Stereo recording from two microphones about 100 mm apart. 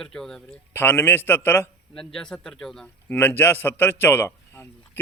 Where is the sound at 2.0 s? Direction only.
10° left (ahead or behind).